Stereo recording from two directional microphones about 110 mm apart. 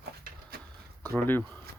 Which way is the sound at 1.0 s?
20° left (ahead or behind).